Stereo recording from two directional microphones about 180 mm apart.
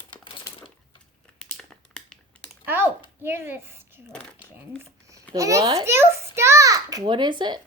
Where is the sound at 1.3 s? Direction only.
5° left (ahead or behind).